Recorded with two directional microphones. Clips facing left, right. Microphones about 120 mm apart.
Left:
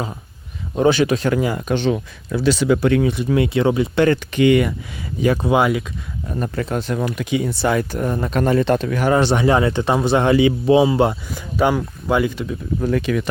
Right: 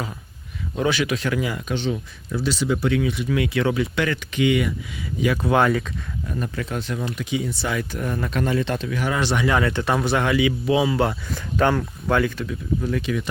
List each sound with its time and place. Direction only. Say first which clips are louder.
0.8 s speech: left 7 dB; 30° left (ahead or behind)
1.7 s speech: left 6 dB; 70° left (ahead or behind)
3.1 s speech: left 5 dB; 30° left (ahead or behind)
4.3 s speech: left 6 dB; 50° left (ahead or behind)
5.4 s speech: right 1 dB; 15° left (ahead or behind)
6.2 s speech: left 5 dB; 35° left (ahead or behind); by 7.8 s 60° left (ahead or behind)
7.8 s speech: left 5 dB; 30° left (ahead or behind)
8.4 s speech: left 9 dB; 50° left (ahead or behind)
9.1 s speech: left 5 dB; 35° left (ahead or behind)
11.3 s speech: left 2 dB; 10° left (ahead or behind)
12.1 s speech: left 3 dB; 20° left (ahead or behind)
12.8 s speech: left 8 dB; 55° left (ahead or behind)